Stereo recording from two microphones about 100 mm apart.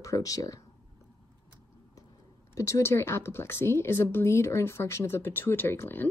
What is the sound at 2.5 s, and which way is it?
Speech, 30° left (ahead or behind).